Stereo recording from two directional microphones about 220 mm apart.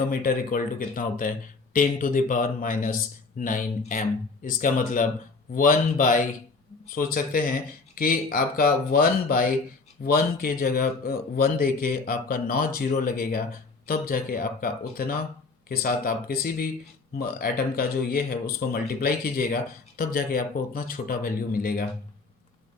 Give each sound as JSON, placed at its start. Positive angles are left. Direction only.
{"t": 0.1, "sound": "speech", "side_deg": 40}